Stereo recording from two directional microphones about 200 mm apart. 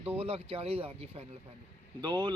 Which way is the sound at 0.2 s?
30° right (ahead or behind).